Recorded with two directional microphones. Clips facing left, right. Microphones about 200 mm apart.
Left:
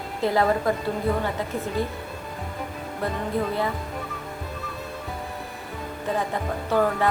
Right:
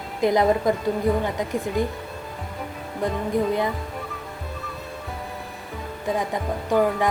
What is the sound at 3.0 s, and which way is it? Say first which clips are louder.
Music: right 3 dB; 15° right (ahead or behind).